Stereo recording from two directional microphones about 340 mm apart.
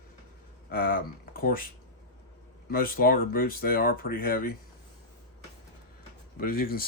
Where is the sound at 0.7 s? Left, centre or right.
Left.